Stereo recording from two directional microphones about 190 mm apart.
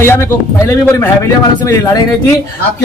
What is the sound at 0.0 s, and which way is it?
A man's voice, 15° left (ahead or behind).